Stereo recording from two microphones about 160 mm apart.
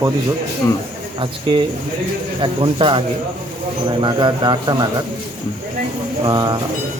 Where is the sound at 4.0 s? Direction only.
30° right (ahead or behind).